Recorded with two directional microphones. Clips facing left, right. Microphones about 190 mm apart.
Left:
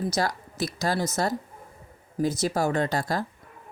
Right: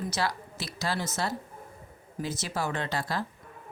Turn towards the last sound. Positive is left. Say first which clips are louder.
# left 6 dB
turn(degrees=40)  # may be behind; listen again after turning